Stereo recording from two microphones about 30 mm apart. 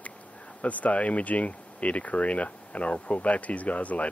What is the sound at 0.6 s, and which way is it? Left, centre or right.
Speech, left.